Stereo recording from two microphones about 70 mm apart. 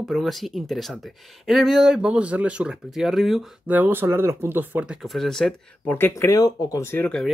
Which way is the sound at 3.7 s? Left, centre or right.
Right.